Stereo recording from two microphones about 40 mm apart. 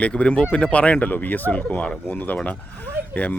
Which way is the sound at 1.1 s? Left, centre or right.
Left.